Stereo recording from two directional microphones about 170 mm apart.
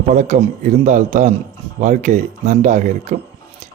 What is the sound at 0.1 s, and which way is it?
Speech, 45° right (ahead or behind).